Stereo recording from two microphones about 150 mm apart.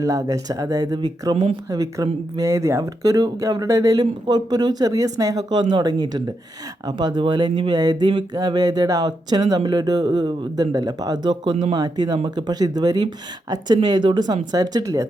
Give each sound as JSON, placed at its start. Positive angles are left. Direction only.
{"t": 0.0, "sound": "speech", "side_deg": -20}